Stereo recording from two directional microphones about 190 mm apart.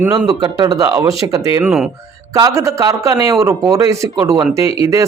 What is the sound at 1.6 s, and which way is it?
Speech, 5° right (ahead or behind).